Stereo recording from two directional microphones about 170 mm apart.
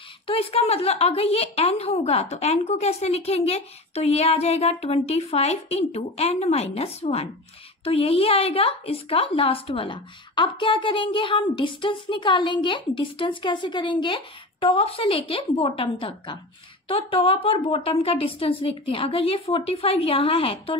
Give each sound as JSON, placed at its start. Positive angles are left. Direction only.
{"t": 0.3, "sound": "a woman's voice", "side_deg": 35}